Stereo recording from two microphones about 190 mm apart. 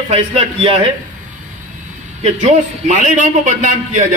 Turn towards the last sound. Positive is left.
turn(degrees=-40)  # may be behind; listen again after turning